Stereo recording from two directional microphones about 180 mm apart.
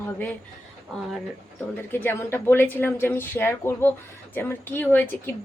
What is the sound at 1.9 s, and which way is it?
Speech, 10° left (ahead or behind).